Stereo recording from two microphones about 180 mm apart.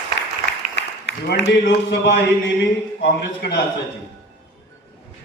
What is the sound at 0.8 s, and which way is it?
A man's voice, 80° left.